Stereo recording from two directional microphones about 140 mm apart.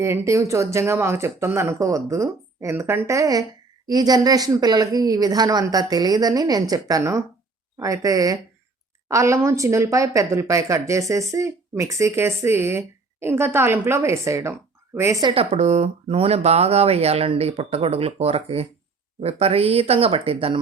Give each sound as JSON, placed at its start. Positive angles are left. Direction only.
{"t": 0.0, "sound": "speech", "side_deg": -20}
{"t": 15.4, "sound": "speech", "side_deg": -50}